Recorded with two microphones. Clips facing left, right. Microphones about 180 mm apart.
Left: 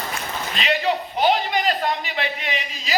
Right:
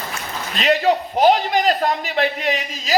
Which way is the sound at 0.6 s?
40° right (ahead or behind).